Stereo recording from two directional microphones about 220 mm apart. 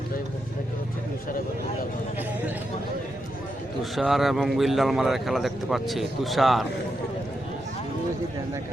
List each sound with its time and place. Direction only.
3.9 s speech: centre (ahead or behind)